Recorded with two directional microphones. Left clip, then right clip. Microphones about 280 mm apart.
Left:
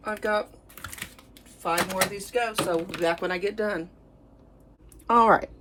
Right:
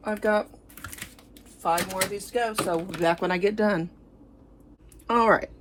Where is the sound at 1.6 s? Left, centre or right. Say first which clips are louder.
Even; centre.